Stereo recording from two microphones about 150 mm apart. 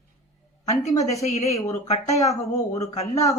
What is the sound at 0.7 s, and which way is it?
A woman's voice, 50° left (ahead or behind).